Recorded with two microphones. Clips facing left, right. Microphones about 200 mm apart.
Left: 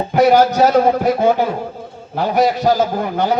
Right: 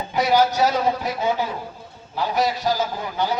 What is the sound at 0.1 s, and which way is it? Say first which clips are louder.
A man's voice: left 7 dB; 55° left (ahead or behind).